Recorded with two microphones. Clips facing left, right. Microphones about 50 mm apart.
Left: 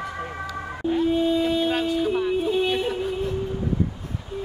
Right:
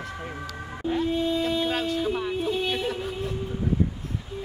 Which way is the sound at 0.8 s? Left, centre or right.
Centre.